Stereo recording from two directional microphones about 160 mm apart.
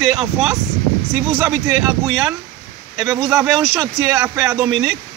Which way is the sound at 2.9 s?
20° right (ahead or behind).